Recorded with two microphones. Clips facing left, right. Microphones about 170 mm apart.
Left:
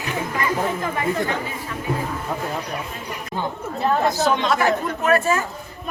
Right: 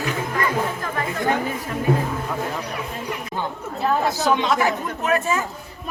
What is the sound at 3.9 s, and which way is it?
Speech, 5° right (ahead or behind).